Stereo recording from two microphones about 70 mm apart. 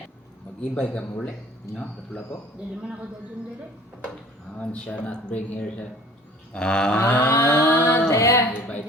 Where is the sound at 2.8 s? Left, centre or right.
Centre.